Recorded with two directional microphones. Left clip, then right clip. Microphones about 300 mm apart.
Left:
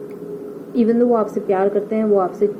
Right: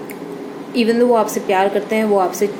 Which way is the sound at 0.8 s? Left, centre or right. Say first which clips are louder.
Right 2 dB; right.